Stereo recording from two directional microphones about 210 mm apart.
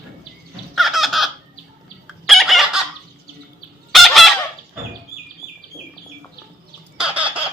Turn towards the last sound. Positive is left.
turn(degrees=-5)  # may be behind; listen again after turning